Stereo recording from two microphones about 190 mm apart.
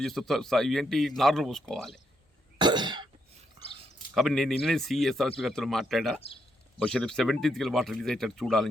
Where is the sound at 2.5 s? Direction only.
25° right (ahead or behind).